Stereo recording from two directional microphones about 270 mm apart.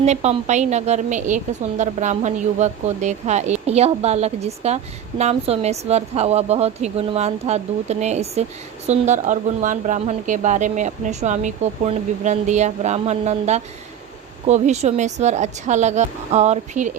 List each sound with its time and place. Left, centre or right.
0.0 s speech: right